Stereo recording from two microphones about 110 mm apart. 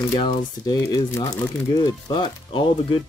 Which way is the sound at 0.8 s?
30° left (ahead or behind).